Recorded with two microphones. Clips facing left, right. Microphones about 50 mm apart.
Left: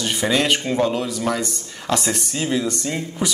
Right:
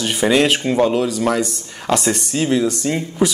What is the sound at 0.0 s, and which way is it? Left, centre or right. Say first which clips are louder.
A man's voice: right 5 dB; centre.